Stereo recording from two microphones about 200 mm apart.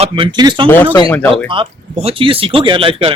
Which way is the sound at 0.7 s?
10° left (ahead or behind).